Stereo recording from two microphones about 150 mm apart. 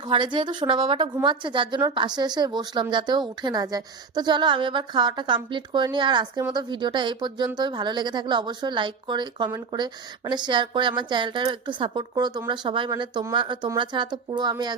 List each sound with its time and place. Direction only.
0.1 s a woman's voice: 30° right (ahead or behind)